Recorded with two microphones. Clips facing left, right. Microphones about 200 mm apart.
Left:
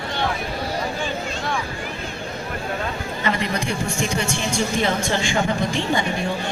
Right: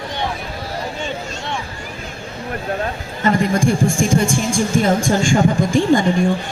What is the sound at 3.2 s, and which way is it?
A man's voice, 45° right (ahead or behind).